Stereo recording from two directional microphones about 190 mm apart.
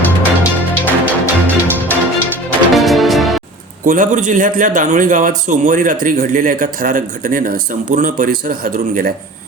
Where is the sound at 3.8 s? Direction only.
45° right (ahead or behind).